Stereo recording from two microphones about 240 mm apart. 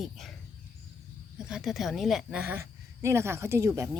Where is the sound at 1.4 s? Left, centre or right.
Centre.